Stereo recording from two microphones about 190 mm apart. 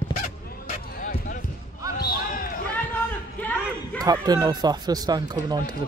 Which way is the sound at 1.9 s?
50° left (ahead or behind).